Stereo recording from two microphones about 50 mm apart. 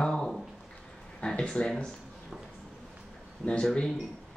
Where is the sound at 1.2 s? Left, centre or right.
Left.